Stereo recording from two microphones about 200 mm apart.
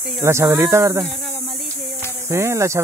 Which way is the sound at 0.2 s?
15° right (ahead or behind).